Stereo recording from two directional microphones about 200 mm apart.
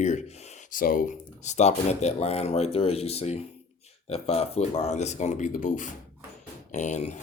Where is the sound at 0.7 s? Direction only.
45° left (ahead or behind).